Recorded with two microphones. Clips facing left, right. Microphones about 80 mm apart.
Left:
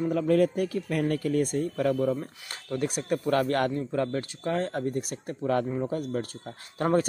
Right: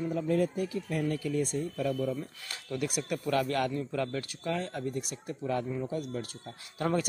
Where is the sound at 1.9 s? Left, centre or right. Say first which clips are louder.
Left 5 dB; left.